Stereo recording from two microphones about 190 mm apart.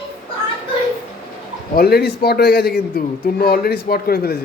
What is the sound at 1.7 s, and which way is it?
A man's voice, 55° left (ahead or behind).